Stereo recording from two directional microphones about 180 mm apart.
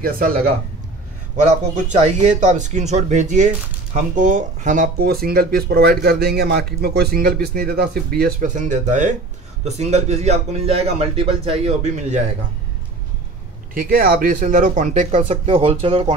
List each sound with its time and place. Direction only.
0.0 s speech: 55° right (ahead or behind)
1.9 s a man's voice: 40° right (ahead or behind)
13.7 s speech: 50° right (ahead or behind)
15.1 s a man's voice: 30° right (ahead or behind)